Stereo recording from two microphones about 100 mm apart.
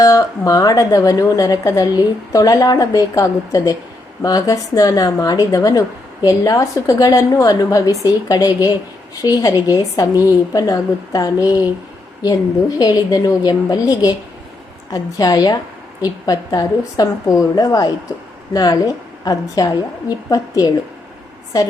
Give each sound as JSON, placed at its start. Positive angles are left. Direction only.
{"t": 0.0, "sound": "a woman's voice", "side_deg": 35}